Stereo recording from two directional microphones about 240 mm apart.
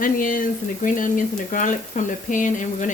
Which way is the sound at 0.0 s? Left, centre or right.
Left.